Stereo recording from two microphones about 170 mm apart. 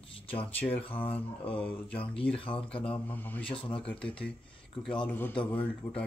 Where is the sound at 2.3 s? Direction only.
30° left (ahead or behind).